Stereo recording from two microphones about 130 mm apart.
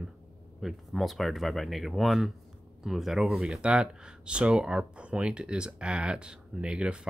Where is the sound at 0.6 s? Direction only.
Centre (ahead or behind).